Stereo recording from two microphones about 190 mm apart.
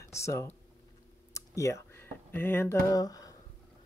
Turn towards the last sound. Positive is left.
turn(degrees=20)  # may be behind; listen again after turning